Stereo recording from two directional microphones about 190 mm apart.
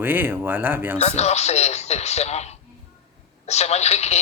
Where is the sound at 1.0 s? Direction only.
35° left (ahead or behind).